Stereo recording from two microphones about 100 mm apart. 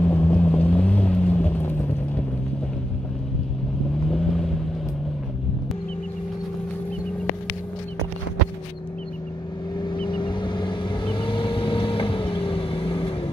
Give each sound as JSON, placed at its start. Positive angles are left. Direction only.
{"t": 0.0, "sound": "vehicle", "side_deg": 20}
{"t": 4.1, "sound": "vehicle", "side_deg": 5}
{"t": 9.8, "sound": "vehicle", "side_deg": 55}